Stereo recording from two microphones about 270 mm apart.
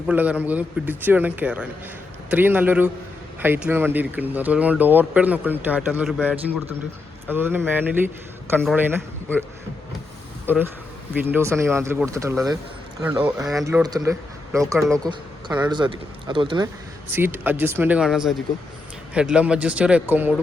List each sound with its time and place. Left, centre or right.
0.1 s a man's voice: centre
10.4 s a man's voice: centre